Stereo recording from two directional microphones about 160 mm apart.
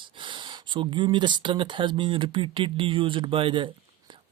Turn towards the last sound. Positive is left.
turn(degrees=-35)  # may be behind; listen again after turning